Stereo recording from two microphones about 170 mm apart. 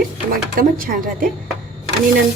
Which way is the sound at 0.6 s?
60° right (ahead or behind).